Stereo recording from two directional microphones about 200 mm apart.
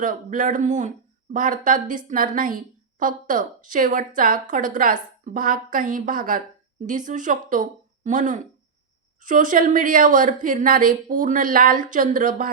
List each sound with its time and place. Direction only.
0.0 s speech: 40° right (ahead or behind)